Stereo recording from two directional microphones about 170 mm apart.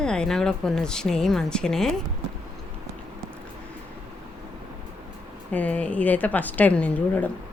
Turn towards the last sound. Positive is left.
turn(degrees=10)  # may be behind; listen again after turning